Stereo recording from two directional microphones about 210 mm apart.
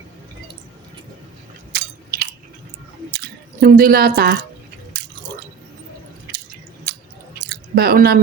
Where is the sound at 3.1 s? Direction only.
45° right (ahead or behind).